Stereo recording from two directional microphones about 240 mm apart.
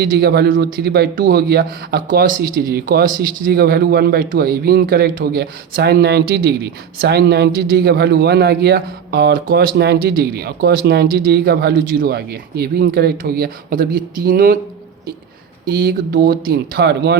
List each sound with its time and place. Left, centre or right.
0.0 s a man's voice: right
15.7 s a man's voice: right